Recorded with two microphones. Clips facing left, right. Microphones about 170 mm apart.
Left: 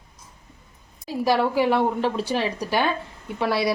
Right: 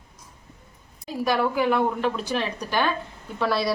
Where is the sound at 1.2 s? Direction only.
30° left (ahead or behind).